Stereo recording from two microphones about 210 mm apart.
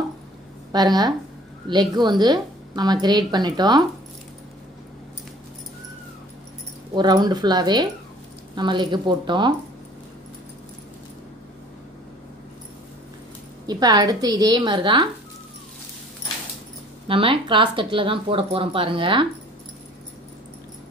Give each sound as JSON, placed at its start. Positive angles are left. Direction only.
{"t": 0.7, "sound": "speech", "side_deg": -20}
{"t": 7.0, "sound": "speech", "side_deg": -20}
{"t": 13.7, "sound": "speech", "side_deg": -20}
{"t": 17.1, "sound": "speech", "side_deg": -25}